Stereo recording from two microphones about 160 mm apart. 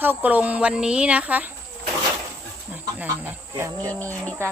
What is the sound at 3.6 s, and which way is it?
Speech, 15° right (ahead or behind).